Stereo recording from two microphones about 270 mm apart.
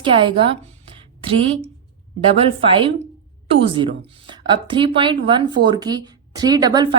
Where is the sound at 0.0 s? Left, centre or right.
Centre.